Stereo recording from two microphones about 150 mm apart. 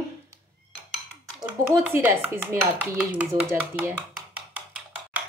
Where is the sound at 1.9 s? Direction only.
15° right (ahead or behind).